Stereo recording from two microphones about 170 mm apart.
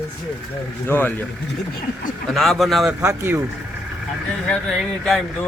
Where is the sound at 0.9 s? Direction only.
10° left (ahead or behind).